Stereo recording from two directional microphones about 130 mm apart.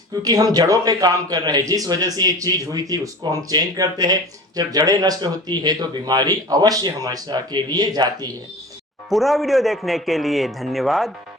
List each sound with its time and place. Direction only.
0.1 s a man's voice: 30° right (ahead or behind)
9.0 s a man's voice: centre (ahead or behind)